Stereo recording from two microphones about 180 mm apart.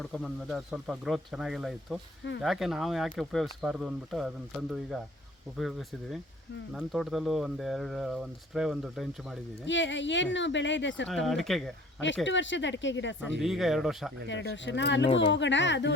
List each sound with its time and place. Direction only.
0.0 s speech: centre (ahead or behind)
5.5 s speech: centre (ahead or behind)
9.6 s speech: 90° left
11.1 s speech: centre (ahead or behind)
12.2 s speech: 90° left
13.4 s speech: centre (ahead or behind)
14.3 s speech: 85° left